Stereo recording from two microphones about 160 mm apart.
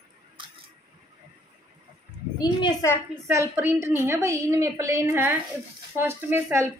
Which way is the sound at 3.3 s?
15° right (ahead or behind).